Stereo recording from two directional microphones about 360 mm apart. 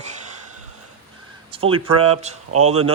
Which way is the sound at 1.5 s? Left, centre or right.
Centre.